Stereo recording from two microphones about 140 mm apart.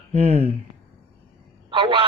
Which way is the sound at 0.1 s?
50° right (ahead or behind).